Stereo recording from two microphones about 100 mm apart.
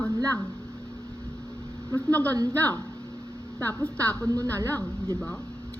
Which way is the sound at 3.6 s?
15° left (ahead or behind).